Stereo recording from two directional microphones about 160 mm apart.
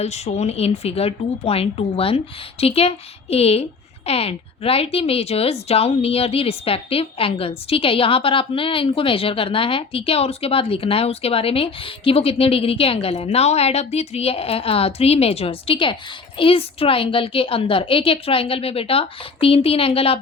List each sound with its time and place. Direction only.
0.0 s a woman's voice: 40° left (ahead or behind)